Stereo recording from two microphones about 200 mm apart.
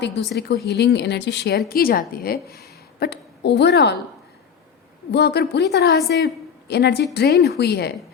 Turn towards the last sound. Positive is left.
turn(degrees=55)  # may be behind; listen again after turning